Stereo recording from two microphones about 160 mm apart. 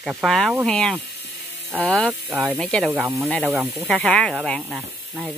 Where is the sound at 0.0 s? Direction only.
Centre (ahead or behind).